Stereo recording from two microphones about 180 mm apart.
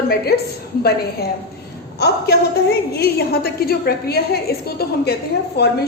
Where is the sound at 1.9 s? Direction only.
65° left (ahead or behind).